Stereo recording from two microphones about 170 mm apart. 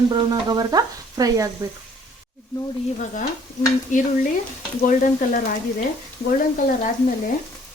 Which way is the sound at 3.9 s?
45° left (ahead or behind).